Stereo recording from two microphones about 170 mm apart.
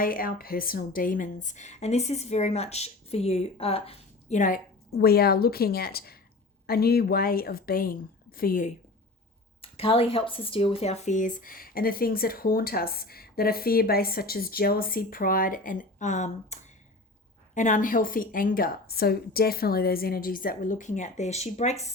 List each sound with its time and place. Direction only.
0.0 s a woman's voice: 55° left (ahead or behind)
9.6 s speech: 35° left (ahead or behind)